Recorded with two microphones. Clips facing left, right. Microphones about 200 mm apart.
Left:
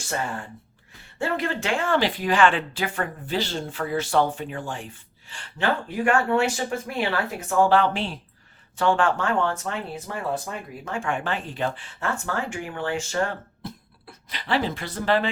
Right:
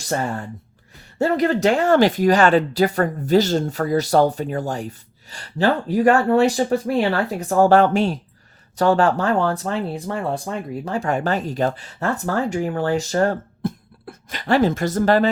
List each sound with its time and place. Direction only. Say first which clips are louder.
1.2 s speech: right 9 dB; 40° right (ahead or behind)